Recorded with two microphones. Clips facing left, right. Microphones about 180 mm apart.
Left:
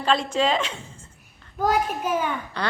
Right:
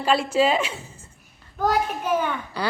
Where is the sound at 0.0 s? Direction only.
10° right (ahead or behind).